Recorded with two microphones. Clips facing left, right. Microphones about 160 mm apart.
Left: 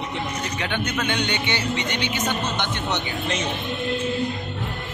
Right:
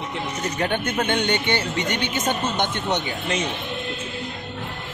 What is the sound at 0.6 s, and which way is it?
Speech, 45° right (ahead or behind).